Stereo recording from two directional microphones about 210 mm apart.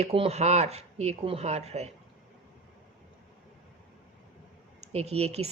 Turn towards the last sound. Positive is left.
turn(degrees=-30)  # may be behind; listen again after turning